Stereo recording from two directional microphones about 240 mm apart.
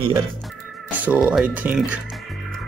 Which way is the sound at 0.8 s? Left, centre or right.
Centre.